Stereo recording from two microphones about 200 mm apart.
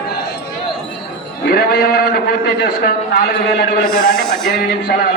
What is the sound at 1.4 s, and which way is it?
A man's voice, 50° left (ahead or behind).